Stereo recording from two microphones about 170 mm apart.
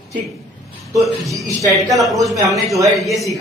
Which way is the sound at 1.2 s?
20° right (ahead or behind).